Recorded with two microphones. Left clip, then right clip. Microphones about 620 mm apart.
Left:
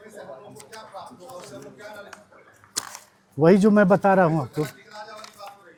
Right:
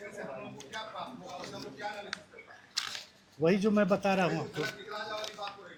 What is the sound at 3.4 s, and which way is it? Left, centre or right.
Speech, left.